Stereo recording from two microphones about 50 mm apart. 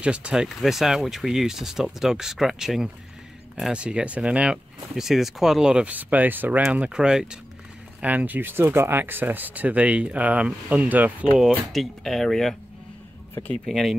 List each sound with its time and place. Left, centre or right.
0.0 s speech: right
0.6 s speech: centre
3.7 s speech: right
4.9 s speech: centre
5.9 s speech: right
6.7 s speech: centre
8.0 s speech: right
11.3 s speech: centre
13.7 s speech: centre